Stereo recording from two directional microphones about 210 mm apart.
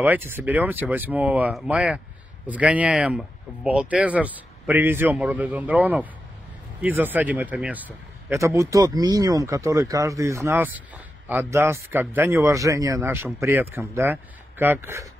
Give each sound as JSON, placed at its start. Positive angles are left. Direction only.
{"t": 0.0, "sound": "a man's voice", "side_deg": -10}